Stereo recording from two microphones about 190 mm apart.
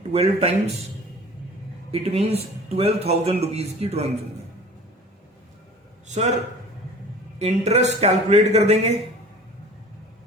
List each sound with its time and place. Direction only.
0.1 s a man's voice: 35° right (ahead or behind)
1.9 s a man's voice: 35° right (ahead or behind)
6.1 s a man's voice: 35° right (ahead or behind)
7.3 s a man's voice: 35° right (ahead or behind)